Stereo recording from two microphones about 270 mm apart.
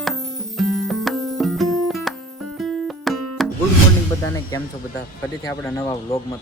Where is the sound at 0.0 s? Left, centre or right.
Centre.